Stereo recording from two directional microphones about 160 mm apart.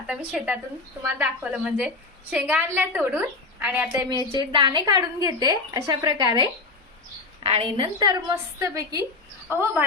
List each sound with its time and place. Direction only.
0.1 s a woman's voice: 5° right (ahead or behind)
4.4 s a woman's voice: 30° right (ahead or behind)